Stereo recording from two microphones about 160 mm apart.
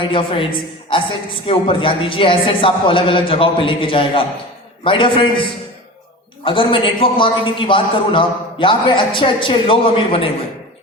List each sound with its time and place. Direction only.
0.0 s a man's voice: 35° left (ahead or behind)
1.5 s a man's voice: 35° left (ahead or behind)